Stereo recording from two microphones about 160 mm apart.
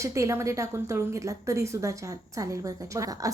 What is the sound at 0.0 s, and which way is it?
A woman's voice, 20° right (ahead or behind).